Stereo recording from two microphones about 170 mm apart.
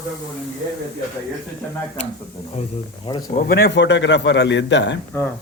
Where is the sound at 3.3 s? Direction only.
55° left (ahead or behind).